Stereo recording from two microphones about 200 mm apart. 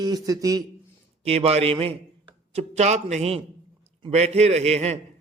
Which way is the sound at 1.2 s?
30° right (ahead or behind).